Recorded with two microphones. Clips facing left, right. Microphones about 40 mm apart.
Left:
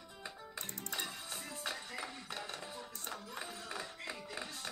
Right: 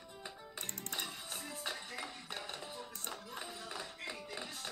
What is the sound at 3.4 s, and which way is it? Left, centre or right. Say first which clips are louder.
Music: left 1 dB; left.